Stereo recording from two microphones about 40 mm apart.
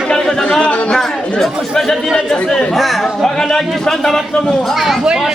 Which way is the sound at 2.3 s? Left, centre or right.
Left.